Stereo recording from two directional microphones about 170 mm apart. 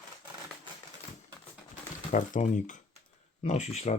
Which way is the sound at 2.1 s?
45° left (ahead or behind).